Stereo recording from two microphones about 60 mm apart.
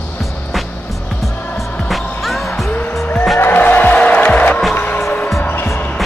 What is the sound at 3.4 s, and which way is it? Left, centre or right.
Music, left.